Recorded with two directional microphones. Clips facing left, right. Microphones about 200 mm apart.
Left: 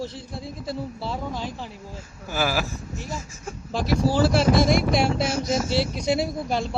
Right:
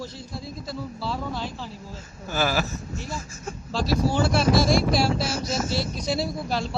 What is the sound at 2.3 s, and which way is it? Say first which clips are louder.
Speech: even; 10° left (ahead or behind).